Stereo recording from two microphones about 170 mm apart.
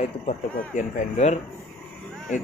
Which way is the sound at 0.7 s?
45° left (ahead or behind).